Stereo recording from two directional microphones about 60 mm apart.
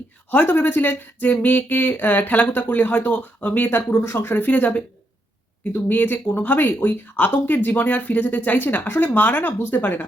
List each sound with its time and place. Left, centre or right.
0.3 s speech: left
4.0 s speech: left